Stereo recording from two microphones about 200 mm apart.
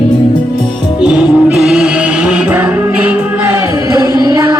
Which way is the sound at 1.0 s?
5° right (ahead or behind).